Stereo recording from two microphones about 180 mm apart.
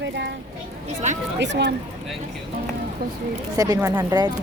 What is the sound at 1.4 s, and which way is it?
Speech, 75° right (ahead or behind).